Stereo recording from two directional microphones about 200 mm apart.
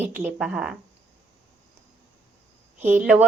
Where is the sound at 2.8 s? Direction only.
10° right (ahead or behind).